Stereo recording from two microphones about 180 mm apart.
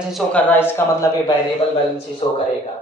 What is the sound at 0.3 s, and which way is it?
Speech, 10° left (ahead or behind).